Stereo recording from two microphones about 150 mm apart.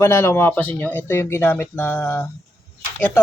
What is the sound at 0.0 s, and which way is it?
Speech, 15° left (ahead or behind).